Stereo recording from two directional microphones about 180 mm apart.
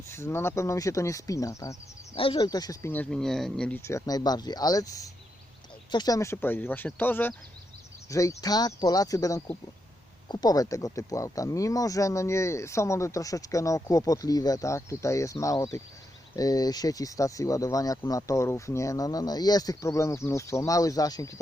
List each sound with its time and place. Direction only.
0.1 s speech: 15° left (ahead or behind)
2.1 s speech: 30° left (ahead or behind)